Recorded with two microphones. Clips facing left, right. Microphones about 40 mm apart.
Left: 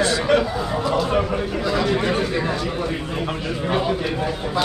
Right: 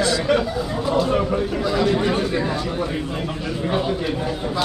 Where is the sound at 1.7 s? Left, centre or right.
Centre.